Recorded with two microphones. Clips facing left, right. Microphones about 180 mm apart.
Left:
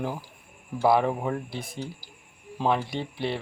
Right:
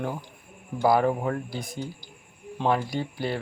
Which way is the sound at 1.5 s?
30° left (ahead or behind).